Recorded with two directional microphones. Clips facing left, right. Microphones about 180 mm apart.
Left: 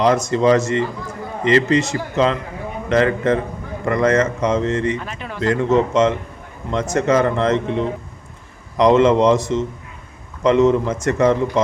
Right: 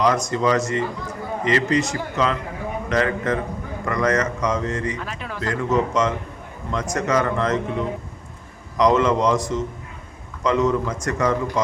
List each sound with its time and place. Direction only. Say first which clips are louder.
0.0 s a man's voice: left 4 dB; 25° left (ahead or behind)
4.9 s speech: left 2 dB; centre (ahead or behind)
5.4 s a man's voice: left 5 dB; 25° left (ahead or behind)